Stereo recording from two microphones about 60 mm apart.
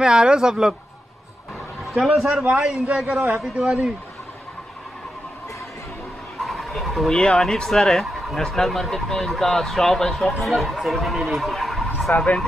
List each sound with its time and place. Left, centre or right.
0.0 s speech: centre
2.0 s a man's voice: centre
2.3 s a man's voice: centre
6.4 s bird: centre
7.2 s speech: centre